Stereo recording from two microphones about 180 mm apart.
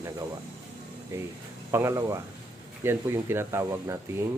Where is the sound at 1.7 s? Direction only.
15° right (ahead or behind).